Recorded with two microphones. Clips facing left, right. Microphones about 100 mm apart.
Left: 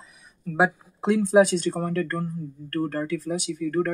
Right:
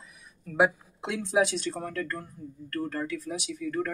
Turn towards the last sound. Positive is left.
turn(degrees=50)  # may be behind; listen again after turning